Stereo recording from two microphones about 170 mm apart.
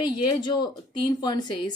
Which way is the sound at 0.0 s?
25° left (ahead or behind).